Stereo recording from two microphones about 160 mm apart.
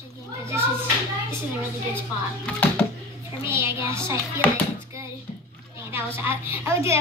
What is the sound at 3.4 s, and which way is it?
Speech, 15° right (ahead or behind).